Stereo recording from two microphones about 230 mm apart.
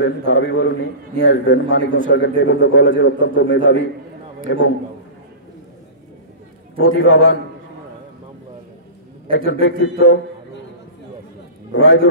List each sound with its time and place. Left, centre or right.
0.0 s a man's voice: left
6.8 s a man's voice: left
9.5 s a man's voice: left
11.7 s a man's voice: left